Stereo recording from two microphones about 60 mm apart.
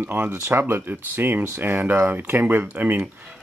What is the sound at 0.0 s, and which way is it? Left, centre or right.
Speech, right.